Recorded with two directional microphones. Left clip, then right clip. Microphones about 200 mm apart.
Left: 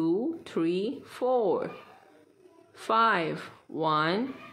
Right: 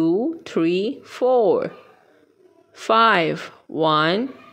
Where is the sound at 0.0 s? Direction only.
30° right (ahead or behind).